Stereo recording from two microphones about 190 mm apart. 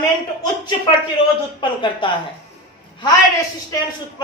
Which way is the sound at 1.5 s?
25° left (ahead or behind).